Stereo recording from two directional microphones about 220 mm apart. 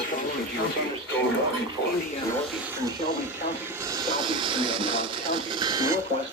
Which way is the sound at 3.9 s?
20° right (ahead or behind).